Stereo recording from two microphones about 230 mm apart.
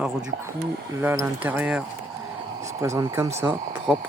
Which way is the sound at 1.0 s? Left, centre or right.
Centre.